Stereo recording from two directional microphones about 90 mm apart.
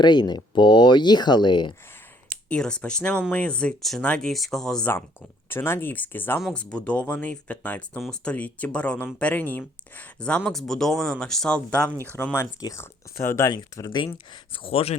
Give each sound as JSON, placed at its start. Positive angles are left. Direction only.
{"t": 0.0, "sound": "speech", "side_deg": 55}
{"t": 2.5, "sound": "speech", "side_deg": 10}
{"t": 5.5, "sound": "speech", "side_deg": 25}
{"t": 6.5, "sound": "speech", "side_deg": 10}
{"t": 12.1, "sound": "speech", "side_deg": 25}
{"t": 12.5, "sound": "speech", "side_deg": 45}
{"t": 12.8, "sound": "speech", "side_deg": 30}
{"t": 13.7, "sound": "speech", "side_deg": 45}
{"t": 14.5, "sound": "speech", "side_deg": 85}